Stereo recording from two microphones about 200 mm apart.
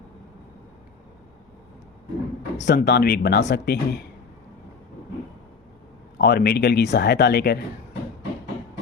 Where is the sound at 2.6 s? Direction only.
55° left (ahead or behind).